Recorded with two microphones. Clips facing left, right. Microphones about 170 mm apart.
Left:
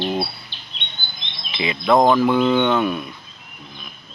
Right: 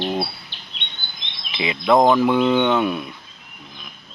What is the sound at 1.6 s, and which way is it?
Speech, 15° right (ahead or behind).